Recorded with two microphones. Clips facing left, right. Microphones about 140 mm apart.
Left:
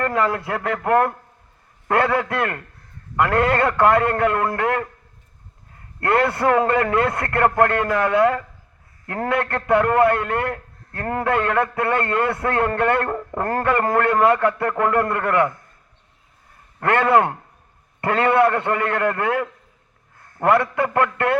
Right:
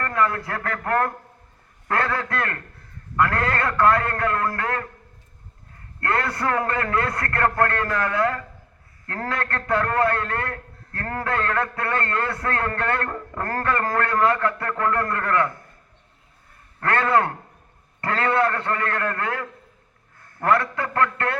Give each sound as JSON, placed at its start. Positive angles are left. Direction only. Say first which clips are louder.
{"t": 0.0, "sound": "a man's voice", "louder": "left 3 dB", "side_deg": 25}
{"t": 6.0, "sound": "a man's voice", "louder": "left 6 dB", "side_deg": 25}
{"t": 16.8, "sound": "a man's voice", "louder": "left 4 dB", "side_deg": 20}